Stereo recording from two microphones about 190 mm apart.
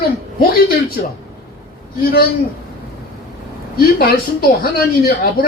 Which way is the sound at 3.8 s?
55° left (ahead or behind).